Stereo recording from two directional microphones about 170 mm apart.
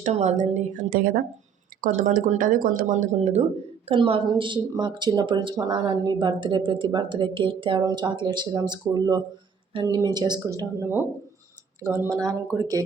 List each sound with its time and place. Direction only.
0.0 s a woman's voice: 40° right (ahead or behind); by 11.0 s 15° right (ahead or behind)
12.0 s a woman's voice: 20° right (ahead or behind)